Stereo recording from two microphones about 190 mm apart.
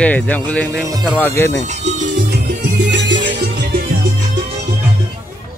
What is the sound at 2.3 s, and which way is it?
Music, 60° right (ahead or behind).